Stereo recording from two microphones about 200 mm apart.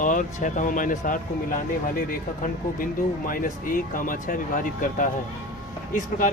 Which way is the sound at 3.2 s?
45° left (ahead or behind).